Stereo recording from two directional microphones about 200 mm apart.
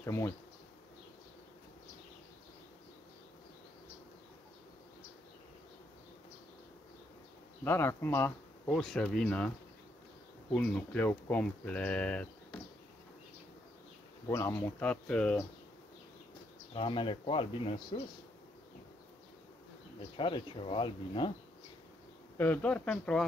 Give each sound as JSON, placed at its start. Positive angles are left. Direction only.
{"t": 0.0, "sound": "bee", "side_deg": 15}
{"t": 7.6, "sound": "speech", "side_deg": 10}
{"t": 10.5, "sound": "speech", "side_deg": 5}
{"t": 14.3, "sound": "speech", "side_deg": 10}
{"t": 16.7, "sound": "speech", "side_deg": 25}
{"t": 20.2, "sound": "speech", "side_deg": 25}
{"t": 22.4, "sound": "speech", "side_deg": 10}